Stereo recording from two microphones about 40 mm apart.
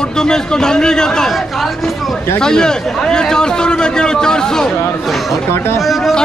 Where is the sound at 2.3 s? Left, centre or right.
Centre.